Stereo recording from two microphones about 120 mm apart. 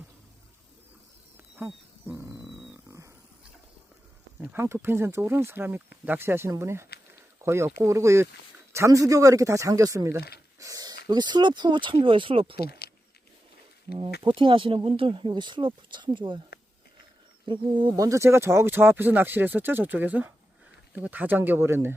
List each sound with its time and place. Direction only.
1.5 s wild animals: 20° right (ahead or behind)
2.3 s a sound: 5° right (ahead or behind)
4.5 s speech: 20° right (ahead or behind); by 12.5 s 50° right (ahead or behind)
14.2 s speech: 45° right (ahead or behind)
17.4 s speech: 45° right (ahead or behind)
17.9 s speech: 30° right (ahead or behind)